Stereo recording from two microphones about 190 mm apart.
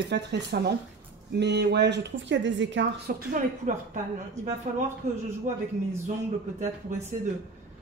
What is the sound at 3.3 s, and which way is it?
Speech, 40° right (ahead or behind).